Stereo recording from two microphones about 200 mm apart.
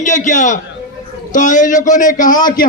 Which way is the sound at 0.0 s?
40° left (ahead or behind).